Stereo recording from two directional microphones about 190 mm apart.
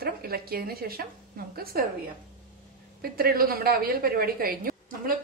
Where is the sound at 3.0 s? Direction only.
50° right (ahead or behind).